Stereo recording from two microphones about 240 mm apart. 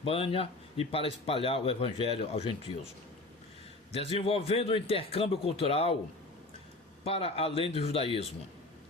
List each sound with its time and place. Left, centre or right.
0.0 s a man's voice: left
3.9 s a man's voice: left
7.0 s a man's voice: left